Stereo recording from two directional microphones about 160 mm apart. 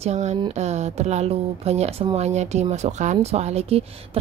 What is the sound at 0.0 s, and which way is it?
Speech, 45° right (ahead or behind).